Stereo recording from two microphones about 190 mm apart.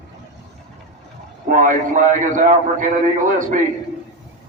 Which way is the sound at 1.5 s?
45° right (ahead or behind).